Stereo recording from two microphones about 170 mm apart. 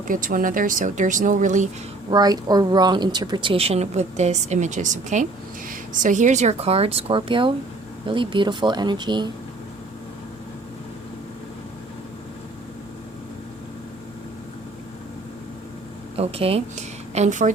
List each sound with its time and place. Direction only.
0.1 s speech: 55° right (ahead or behind)
2.0 s a woman's voice: 25° right (ahead or behind)
16.1 s a woman's voice: 35° right (ahead or behind)